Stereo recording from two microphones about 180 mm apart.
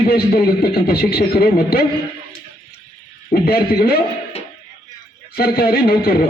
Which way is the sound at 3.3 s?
60° left (ahead or behind).